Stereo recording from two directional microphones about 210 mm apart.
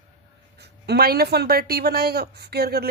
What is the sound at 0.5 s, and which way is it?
Speech, 50° right (ahead or behind).